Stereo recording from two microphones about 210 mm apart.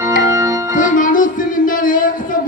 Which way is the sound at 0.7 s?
40° left (ahead or behind).